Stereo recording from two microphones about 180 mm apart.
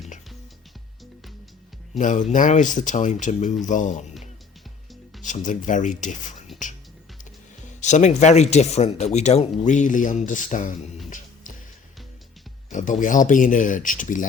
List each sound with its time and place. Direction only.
2.0 s speech: 45° left (ahead or behind)
5.2 s speech: 45° left (ahead or behind)
7.8 s speech: 40° left (ahead or behind)
12.7 s speech: 45° left (ahead or behind)